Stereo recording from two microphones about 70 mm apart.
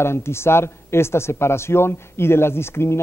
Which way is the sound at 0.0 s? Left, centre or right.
Left.